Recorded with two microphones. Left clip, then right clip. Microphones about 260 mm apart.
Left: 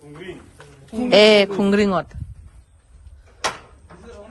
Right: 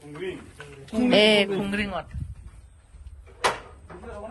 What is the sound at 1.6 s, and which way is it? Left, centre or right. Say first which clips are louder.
Speech: left 11 dB; centre.